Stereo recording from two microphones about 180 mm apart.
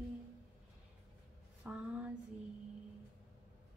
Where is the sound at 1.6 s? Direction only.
10° right (ahead or behind).